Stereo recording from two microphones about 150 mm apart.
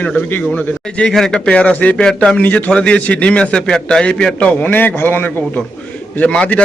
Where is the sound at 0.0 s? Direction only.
10° left (ahead or behind).